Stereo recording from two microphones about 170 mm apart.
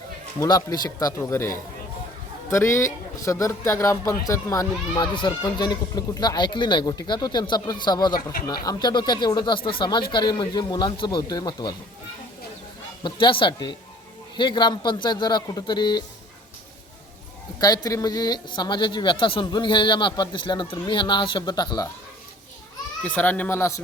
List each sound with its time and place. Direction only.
0.3 s a man's voice: 20° left (ahead or behind)
2.5 s a man's voice: 15° left (ahead or behind)
8.1 s speech: 60° left (ahead or behind)
8.6 s a man's voice: 25° left (ahead or behind)
13.0 s a man's voice: 30° left (ahead or behind)
17.8 s a man's voice: 20° left (ahead or behind)
23.0 s speech: 10° left (ahead or behind)